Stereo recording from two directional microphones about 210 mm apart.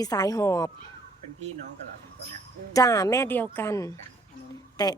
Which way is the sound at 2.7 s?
15° left (ahead or behind).